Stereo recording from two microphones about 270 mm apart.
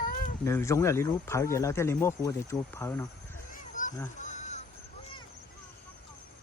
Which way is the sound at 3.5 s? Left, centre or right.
Left.